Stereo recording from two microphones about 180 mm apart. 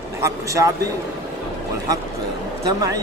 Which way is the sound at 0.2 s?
15° right (ahead or behind).